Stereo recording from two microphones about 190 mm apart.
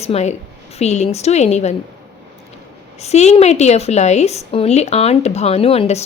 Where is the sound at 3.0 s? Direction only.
35° left (ahead or behind).